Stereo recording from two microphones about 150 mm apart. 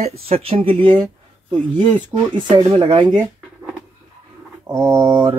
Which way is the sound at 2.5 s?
35° right (ahead or behind).